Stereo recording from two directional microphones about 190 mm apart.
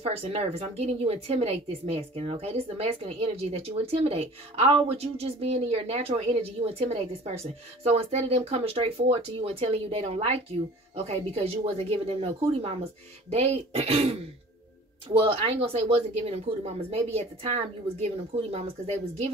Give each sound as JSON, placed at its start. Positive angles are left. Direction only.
{"t": 0.0, "sound": "a woman's voice", "side_deg": -30}
{"t": 15.1, "sound": "a woman's voice", "side_deg": -30}